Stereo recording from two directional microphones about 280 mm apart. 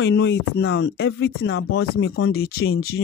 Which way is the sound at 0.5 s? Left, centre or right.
Left.